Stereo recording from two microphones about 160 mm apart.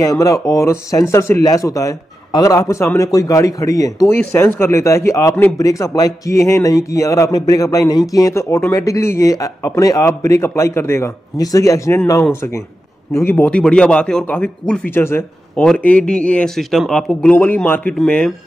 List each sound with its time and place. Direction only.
0.0 s speech: 20° left (ahead or behind); by 18.3 s 5° left (ahead or behind)